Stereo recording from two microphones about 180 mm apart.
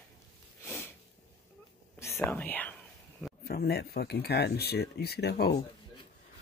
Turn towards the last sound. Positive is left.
turn(degrees=65)  # may be behind; listen again after turning